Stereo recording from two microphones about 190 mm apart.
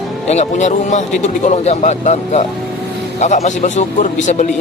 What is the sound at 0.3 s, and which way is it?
Speech, 35° left (ahead or behind).